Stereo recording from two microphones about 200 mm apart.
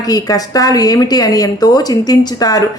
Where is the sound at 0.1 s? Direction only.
20° left (ahead or behind).